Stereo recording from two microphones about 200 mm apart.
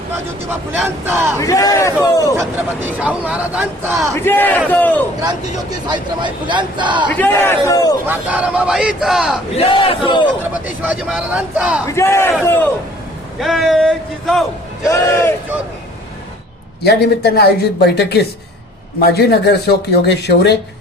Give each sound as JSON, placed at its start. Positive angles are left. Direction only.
{"t": 0.7, "sound": "speech", "side_deg": -10}
{"t": 1.4, "sound": "a man's voice", "side_deg": 15}
{"t": 2.3, "sound": "speech", "side_deg": -10}
{"t": 4.1, "sound": "a man's voice", "side_deg": 10}
{"t": 5.9, "sound": "a man's voice", "side_deg": -25}
{"t": 7.1, "sound": "a man's voice", "side_deg": 10}
{"t": 8.0, "sound": "speech", "side_deg": -10}
{"t": 9.6, "sound": "battle cry", "side_deg": 25}
{"t": 10.8, "sound": "speech", "side_deg": -5}
{"t": 11.9, "sound": "a man's voice", "side_deg": 15}
{"t": 13.4, "sound": "speech", "side_deg": 0}
{"t": 14.8, "sound": "a man's voice", "side_deg": 15}
{"t": 16.8, "sound": "speech", "side_deg": 55}